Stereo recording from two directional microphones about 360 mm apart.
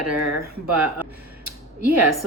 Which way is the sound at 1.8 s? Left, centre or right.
Right.